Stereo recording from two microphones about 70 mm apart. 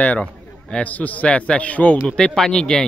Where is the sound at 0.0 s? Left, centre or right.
Centre.